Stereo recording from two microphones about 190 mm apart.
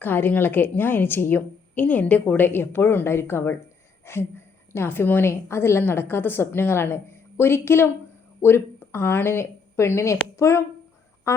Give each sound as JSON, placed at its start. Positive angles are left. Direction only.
{"t": 0.0, "sound": "a woman's voice", "side_deg": 10}
{"t": 11.3, "sound": "duck", "side_deg": 15}